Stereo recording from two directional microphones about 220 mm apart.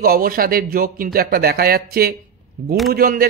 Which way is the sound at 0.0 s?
40° right (ahead or behind).